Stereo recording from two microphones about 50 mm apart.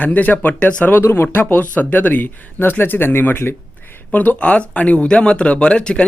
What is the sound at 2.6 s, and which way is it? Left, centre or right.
Speech, left.